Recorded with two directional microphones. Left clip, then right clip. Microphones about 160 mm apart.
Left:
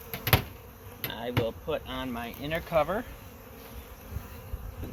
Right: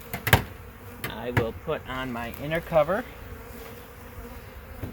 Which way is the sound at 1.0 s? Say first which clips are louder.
Right 3 dB; 35° right (ahead or behind).